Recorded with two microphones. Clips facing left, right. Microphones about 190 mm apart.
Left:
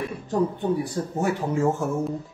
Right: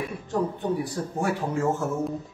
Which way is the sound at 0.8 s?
25° left (ahead or behind).